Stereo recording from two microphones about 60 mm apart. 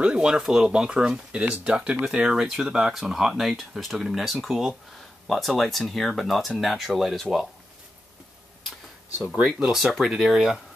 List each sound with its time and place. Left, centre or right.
0.0 s speech: centre
9.2 s speech: centre